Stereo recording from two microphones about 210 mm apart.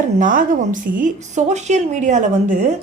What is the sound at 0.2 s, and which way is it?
A woman's voice, 40° right (ahead or behind).